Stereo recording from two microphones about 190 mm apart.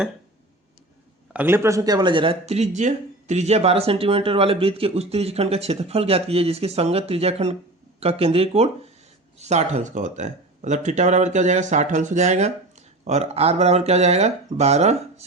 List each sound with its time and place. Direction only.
1.3 s speech: 10° right (ahead or behind); by 14.9 s 35° right (ahead or behind)